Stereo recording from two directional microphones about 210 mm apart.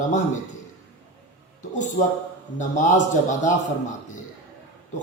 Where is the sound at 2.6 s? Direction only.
35° left (ahead or behind).